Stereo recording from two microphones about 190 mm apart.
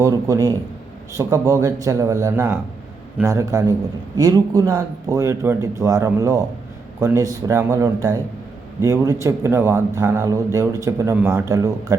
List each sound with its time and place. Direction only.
0.0 s speech: 15° right (ahead or behind)